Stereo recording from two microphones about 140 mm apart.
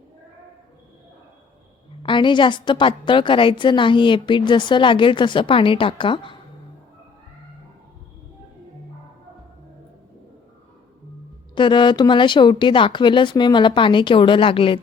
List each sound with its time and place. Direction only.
2.0 s a woman's voice: 35° left (ahead or behind)
11.5 s a woman's voice: 35° left (ahead or behind)